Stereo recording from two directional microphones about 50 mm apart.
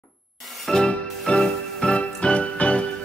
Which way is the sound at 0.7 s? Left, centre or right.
Centre.